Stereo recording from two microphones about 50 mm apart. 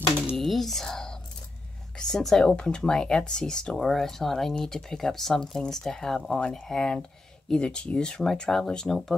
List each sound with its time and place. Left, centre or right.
0.4 s computer keyboard: centre
2.0 s a woman's voice: centre